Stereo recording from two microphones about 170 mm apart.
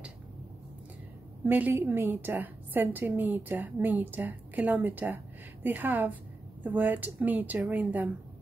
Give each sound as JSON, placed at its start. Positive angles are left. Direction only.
{"t": 1.4, "sound": "a woman's voice", "side_deg": -10}